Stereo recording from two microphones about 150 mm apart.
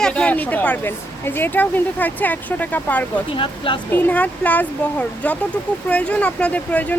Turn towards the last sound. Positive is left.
turn(degrees=10)  # may be behind; listen again after turning